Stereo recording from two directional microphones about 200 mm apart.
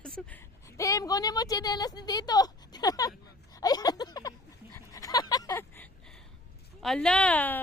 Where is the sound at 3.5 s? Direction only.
20° left (ahead or behind).